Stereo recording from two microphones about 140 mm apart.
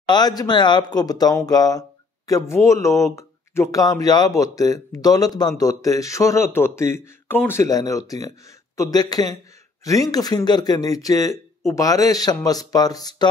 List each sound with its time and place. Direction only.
0.1 s speech: 30° left (ahead or behind)